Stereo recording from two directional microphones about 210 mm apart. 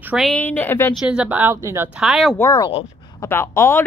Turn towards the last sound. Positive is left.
turn(degrees=15)  # may be behind; listen again after turning